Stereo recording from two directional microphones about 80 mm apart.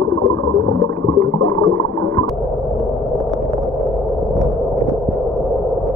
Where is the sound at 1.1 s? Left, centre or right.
Left.